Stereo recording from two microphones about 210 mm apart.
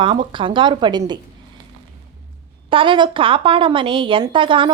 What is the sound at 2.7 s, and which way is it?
A woman's voice, 25° right (ahead or behind).